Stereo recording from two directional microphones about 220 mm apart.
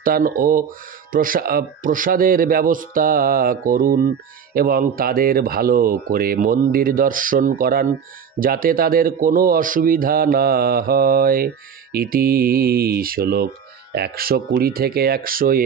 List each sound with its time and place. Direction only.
0.0 s a man's voice: 40° right (ahead or behind)